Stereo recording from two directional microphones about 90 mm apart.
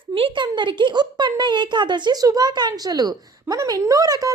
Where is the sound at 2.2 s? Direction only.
45° right (ahead or behind).